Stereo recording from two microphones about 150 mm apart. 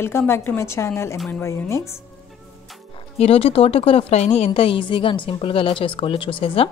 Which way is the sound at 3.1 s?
40° left (ahead or behind).